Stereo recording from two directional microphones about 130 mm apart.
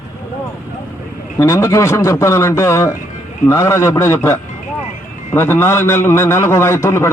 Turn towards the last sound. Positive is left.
turn(degrees=20)  # may be behind; listen again after turning